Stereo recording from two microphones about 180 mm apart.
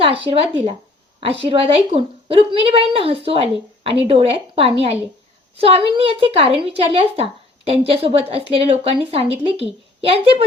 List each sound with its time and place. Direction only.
0.0 s a woman's voice: 30° right (ahead or behind)